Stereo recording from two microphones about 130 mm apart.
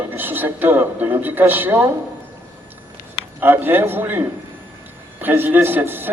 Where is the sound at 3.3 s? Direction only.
15° right (ahead or behind).